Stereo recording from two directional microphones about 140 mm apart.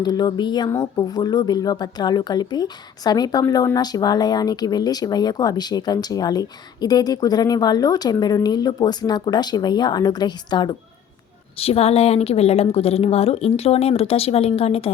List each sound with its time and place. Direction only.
0.0 s speech: 30° left (ahead or behind)
11.5 s a woman's voice: 45° left (ahead or behind)